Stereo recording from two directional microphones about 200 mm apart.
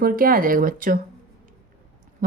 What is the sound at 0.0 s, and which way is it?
Speech, 45° right (ahead or behind).